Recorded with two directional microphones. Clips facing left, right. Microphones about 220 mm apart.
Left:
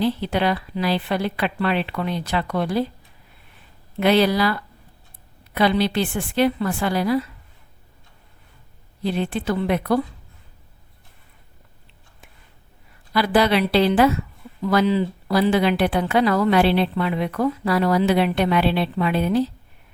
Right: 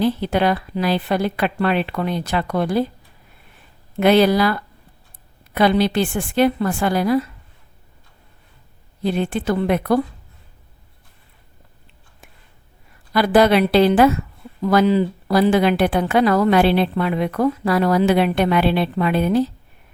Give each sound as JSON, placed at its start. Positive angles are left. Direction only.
{"t": 0.0, "sound": "a woman's voice", "side_deg": -50}
{"t": 4.0, "sound": "a woman's voice", "side_deg": -50}
{"t": 5.5, "sound": "a woman's voice", "side_deg": -50}
{"t": 9.0, "sound": "a woman's voice", "side_deg": -45}
{"t": 13.1, "sound": "a woman's voice", "side_deg": -45}